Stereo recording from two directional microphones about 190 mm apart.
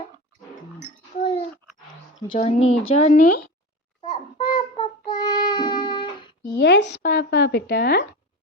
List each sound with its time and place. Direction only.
1.2 s dog: 30° left (ahead or behind)
2.3 s a woman's voice: 35° left (ahead or behind)
4.0 s child singing: 25° left (ahead or behind)
6.6 s speech: 65° left (ahead or behind)